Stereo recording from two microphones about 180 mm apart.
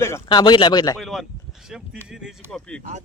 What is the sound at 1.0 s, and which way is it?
Speech, centre (ahead or behind).